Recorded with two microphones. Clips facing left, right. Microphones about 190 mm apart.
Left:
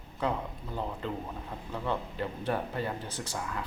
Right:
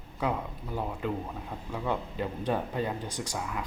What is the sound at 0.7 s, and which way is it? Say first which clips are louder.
Speech: right 3 dB; 10° right (ahead or behind).